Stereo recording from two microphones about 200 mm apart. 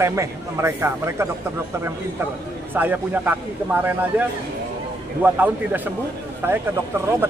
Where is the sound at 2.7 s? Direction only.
10° right (ahead or behind).